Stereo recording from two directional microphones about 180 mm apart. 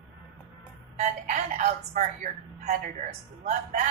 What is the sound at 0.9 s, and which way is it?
A man's voice, 45° right (ahead or behind).